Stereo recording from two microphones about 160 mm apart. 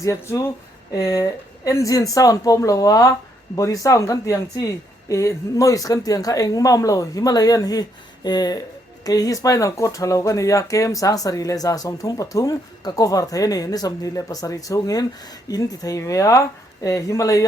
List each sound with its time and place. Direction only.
0.0 s speech: 20° left (ahead or behind)